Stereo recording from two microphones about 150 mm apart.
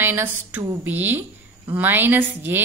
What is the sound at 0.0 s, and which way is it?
A woman's voice, 15° right (ahead or behind).